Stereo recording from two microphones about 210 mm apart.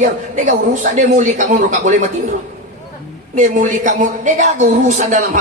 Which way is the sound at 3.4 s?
35° right (ahead or behind).